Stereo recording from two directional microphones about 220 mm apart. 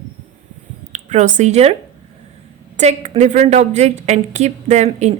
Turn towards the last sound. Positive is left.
turn(degrees=-30)  # may be behind; listen again after turning